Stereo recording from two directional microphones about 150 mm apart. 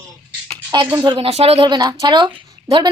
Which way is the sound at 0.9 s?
30° right (ahead or behind).